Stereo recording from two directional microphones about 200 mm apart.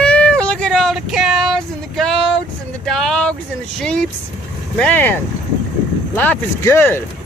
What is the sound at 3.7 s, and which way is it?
Speech, 5° left (ahead or behind).